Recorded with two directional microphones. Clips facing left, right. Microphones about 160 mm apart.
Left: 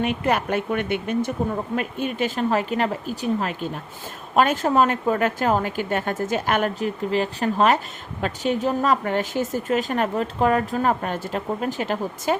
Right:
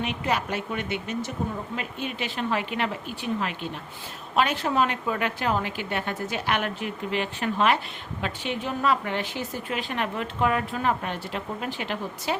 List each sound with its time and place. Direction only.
0.0 s a woman's voice: 50° left (ahead or behind)